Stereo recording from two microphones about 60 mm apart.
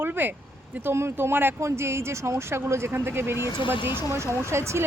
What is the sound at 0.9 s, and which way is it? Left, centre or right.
Speech, right.